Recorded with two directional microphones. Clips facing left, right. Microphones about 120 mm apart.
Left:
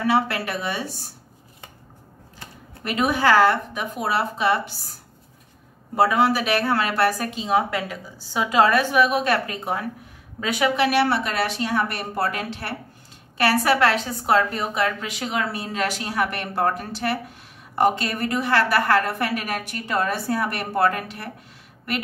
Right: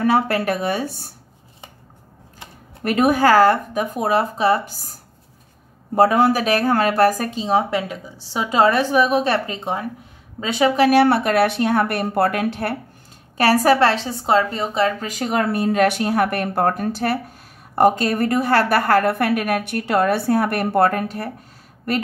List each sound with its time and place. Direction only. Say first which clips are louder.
0.0 s a woman's voice: right 4 dB; 45° right (ahead or behind)
2.8 s a woman's voice: right 5 dB; 50° right (ahead or behind)
5.9 s a woman's voice: right 4 dB; 45° right (ahead or behind); by 10.7 s 30° right (ahead or behind)
10.8 s a woman's voice: right 8 dB; 45° right (ahead or behind)
13.4 s a woman's voice: right 4 dB; 40° right (ahead or behind)
15.0 s a woman's voice: right 6 dB; 45° right (ahead or behind)